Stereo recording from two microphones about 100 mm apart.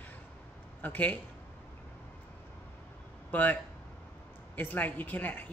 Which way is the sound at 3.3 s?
15° left (ahead or behind).